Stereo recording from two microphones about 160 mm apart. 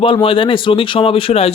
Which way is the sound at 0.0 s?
35° left (ahead or behind).